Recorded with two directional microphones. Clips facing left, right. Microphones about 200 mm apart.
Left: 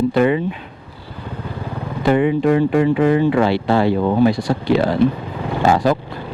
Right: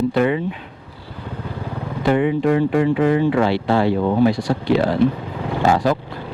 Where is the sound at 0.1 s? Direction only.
15° left (ahead or behind).